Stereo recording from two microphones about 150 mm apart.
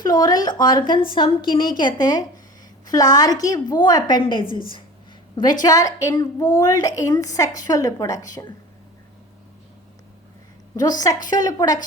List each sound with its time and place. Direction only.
0.0 s a woman's voice: 25° left (ahead or behind)
5.6 s a woman's voice: 25° left (ahead or behind)
10.8 s a woman's voice: 25° left (ahead or behind)